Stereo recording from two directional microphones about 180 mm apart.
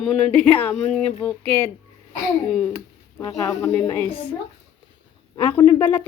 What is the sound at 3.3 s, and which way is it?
Speech, 5° left (ahead or behind).